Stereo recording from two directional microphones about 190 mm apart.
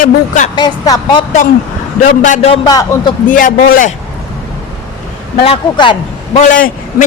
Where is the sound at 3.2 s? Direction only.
45° left (ahead or behind).